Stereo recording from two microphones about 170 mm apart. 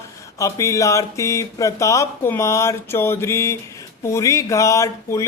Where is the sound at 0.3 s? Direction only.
20° left (ahead or behind).